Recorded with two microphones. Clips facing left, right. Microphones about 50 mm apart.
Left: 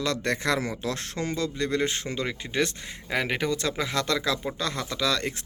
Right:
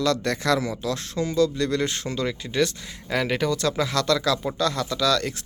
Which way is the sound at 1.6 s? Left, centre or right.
Centre.